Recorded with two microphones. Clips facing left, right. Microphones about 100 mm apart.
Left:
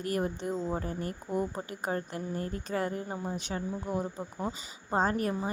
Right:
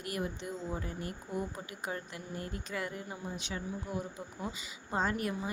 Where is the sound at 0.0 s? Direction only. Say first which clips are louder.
Left 6 dB; 40° left (ahead or behind).